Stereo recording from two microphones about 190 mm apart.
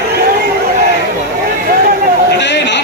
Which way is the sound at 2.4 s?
65° left (ahead or behind).